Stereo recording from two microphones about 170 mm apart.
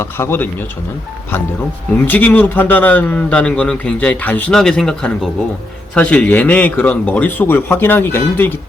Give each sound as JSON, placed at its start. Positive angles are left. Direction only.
{"t": 0.0, "sound": "a man's voice", "side_deg": 15}
{"t": 2.0, "sound": "a man's voice", "side_deg": 10}